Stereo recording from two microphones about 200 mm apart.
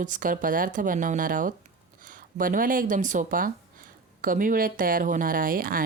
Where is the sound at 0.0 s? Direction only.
40° right (ahead or behind).